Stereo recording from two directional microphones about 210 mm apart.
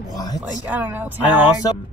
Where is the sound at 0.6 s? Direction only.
10° right (ahead or behind).